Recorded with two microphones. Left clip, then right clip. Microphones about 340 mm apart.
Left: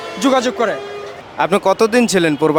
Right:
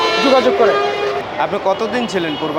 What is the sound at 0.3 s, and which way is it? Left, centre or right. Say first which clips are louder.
Speech: right 3 dB; left.